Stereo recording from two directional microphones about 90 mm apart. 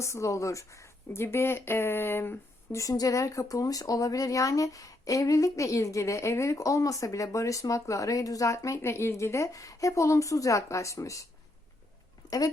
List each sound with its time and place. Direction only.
0.0 s speech: 35° left (ahead or behind)
2.7 s speech: 40° left (ahead or behind)